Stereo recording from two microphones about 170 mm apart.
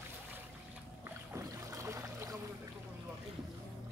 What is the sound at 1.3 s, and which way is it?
Boat, 20° right (ahead or behind).